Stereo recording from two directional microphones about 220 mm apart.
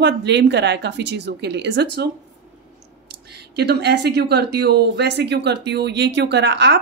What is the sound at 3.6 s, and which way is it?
Speech, 50° right (ahead or behind).